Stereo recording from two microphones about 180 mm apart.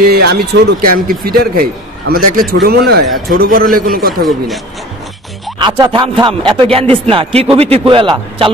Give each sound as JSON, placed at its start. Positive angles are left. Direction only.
{"t": 0.0, "sound": "a man's voice", "side_deg": -60}
{"t": 4.2, "sound": "speech", "side_deg": 0}
{"t": 5.6, "sound": "speech", "side_deg": -25}